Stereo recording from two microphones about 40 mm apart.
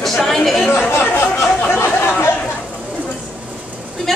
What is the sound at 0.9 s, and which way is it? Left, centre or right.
Speech, left.